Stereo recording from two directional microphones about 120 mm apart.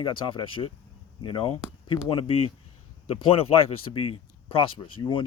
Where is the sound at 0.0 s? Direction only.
45° left (ahead or behind).